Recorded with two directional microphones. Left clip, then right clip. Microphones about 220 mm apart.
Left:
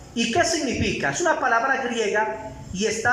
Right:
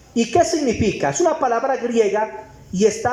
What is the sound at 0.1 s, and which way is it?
A woman's voice, 20° right (ahead or behind).